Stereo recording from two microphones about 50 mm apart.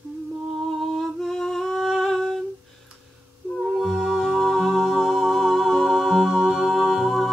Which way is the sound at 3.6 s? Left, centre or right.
Centre.